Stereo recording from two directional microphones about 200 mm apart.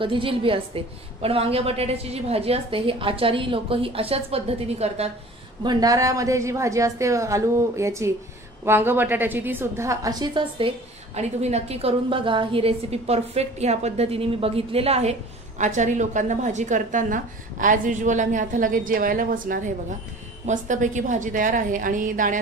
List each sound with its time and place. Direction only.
0.0 s a woman's voice: 25° right (ahead or behind)
5.6 s a woman's voice: 20° right (ahead or behind)
11.1 s a woman's voice: 30° right (ahead or behind)